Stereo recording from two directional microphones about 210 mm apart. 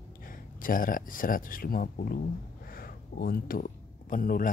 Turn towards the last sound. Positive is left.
turn(degrees=40)  # may be behind; listen again after turning